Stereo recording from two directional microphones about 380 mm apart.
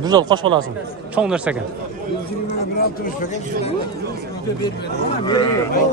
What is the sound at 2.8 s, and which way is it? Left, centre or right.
Speech, left.